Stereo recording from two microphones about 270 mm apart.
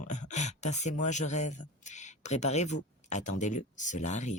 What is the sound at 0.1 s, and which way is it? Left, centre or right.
Speech, left.